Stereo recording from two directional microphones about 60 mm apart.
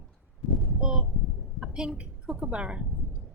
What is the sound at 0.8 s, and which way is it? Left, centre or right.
A woman's voice, centre.